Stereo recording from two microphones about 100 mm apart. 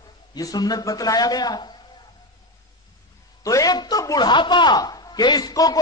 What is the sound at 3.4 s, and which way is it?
A man's voice, 35° left (ahead or behind).